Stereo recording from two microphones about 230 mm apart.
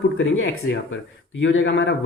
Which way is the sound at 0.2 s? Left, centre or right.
Left.